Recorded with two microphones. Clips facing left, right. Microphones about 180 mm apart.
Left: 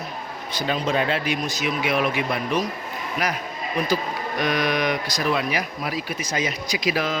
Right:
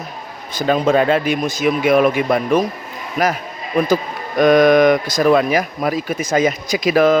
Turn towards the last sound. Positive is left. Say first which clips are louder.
# right 11 dB
turn(degrees=-50)  # may be behind; listen again after turning